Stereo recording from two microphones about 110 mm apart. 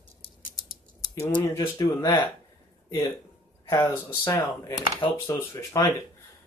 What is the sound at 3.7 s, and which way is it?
Speech, 25° left (ahead or behind).